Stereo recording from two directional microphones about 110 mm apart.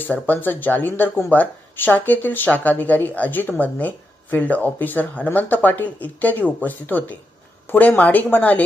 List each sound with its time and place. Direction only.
0.0 s speech: 15° left (ahead or behind)